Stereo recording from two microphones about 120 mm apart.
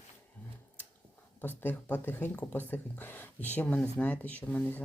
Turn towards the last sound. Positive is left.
turn(degrees=10)  # may be behind; listen again after turning